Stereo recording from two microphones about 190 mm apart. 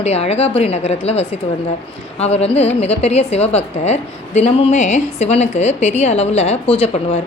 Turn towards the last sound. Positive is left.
turn(degrees=30)  # may be behind; listen again after turning